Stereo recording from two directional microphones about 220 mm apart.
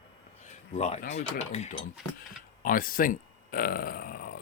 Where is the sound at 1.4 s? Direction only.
30° left (ahead or behind).